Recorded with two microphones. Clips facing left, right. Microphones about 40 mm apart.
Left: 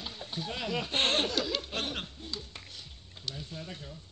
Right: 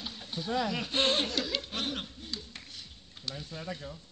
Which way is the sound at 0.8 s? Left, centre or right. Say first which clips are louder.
Even; left.